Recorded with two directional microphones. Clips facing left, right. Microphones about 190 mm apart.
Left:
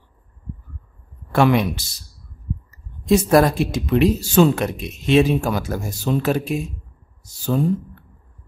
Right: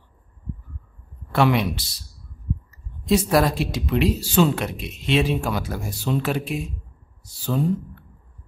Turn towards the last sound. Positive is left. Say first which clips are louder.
# left 3 dB
turn(degrees=45)  # may be behind; listen again after turning